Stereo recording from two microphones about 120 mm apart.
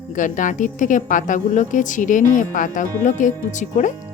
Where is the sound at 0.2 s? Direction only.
90° left.